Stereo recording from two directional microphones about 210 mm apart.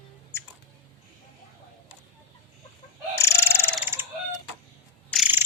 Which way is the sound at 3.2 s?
15° left (ahead or behind).